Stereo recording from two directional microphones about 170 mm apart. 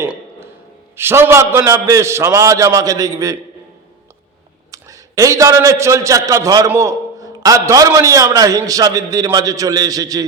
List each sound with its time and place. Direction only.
0.0 s a sound: 15° right (ahead or behind)
0.9 s a man's voice: 15° right (ahead or behind)
4.7 s a man's voice: 20° right (ahead or behind)